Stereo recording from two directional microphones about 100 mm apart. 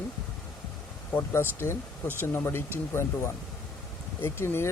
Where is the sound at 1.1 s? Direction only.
25° left (ahead or behind).